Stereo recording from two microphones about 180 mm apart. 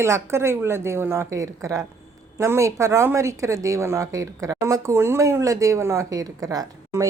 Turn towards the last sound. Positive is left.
turn(degrees=-20)  # may be behind; listen again after turning